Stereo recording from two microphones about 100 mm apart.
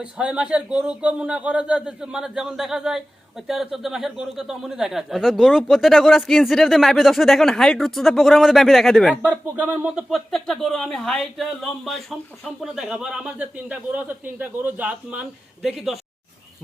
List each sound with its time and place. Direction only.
0.0 s a man's voice: 10° right (ahead or behind)
9.6 s a man's voice: 20° right (ahead or behind)
9.9 s speech: centre (ahead or behind)
12.6 s a man's voice: 5° right (ahead or behind)
15.6 s speech: 5° right (ahead or behind)